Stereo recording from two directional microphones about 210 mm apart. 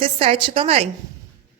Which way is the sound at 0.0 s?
25° right (ahead or behind).